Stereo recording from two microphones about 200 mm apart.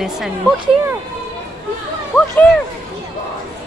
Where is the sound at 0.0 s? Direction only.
Centre (ahead or behind).